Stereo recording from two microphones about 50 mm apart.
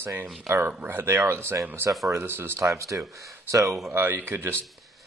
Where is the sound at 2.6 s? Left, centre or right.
Right.